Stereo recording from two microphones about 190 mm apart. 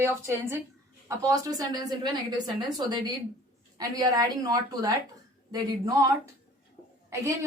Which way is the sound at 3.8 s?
20° right (ahead or behind).